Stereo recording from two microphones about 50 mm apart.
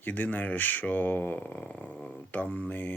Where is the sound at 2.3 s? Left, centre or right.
Left.